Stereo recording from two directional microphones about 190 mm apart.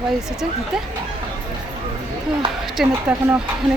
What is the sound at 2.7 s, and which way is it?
Speech, 5° right (ahead or behind).